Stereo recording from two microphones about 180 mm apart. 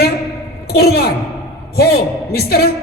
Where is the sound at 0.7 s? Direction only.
60° left (ahead or behind).